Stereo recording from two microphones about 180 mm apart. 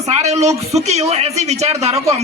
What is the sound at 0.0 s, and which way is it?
A woman's voice, 35° right (ahead or behind).